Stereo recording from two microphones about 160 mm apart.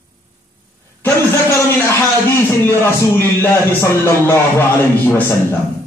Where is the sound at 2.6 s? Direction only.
15° left (ahead or behind).